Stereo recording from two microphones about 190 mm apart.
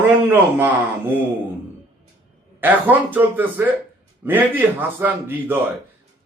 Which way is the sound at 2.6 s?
10° right (ahead or behind).